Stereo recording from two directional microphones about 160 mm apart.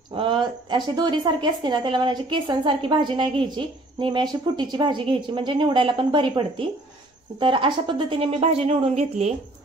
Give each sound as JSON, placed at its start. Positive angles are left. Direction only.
{"t": 0.1, "sound": "a woman's voice", "side_deg": -35}